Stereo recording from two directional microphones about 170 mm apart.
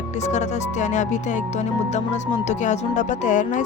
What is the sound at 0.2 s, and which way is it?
Speech, 45° left (ahead or behind).